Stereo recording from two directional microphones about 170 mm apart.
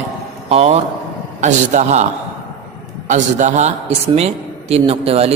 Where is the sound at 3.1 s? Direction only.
45° right (ahead or behind).